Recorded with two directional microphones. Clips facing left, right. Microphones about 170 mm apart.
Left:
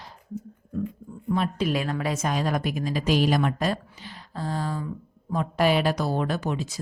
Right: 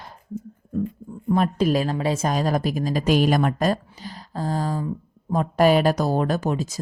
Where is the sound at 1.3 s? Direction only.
40° right (ahead or behind).